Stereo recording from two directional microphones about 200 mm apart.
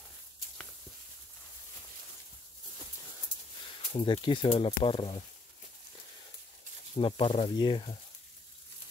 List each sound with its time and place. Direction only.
3.9 s speech: 25° left (ahead or behind)
7.0 s speech: 25° left (ahead or behind)